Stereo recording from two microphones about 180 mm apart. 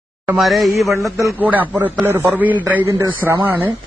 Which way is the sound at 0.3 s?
Centre (ahead or behind).